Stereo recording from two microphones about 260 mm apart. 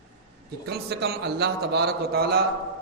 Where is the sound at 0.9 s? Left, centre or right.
Right.